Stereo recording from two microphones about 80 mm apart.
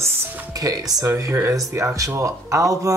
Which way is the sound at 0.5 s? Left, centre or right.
Right.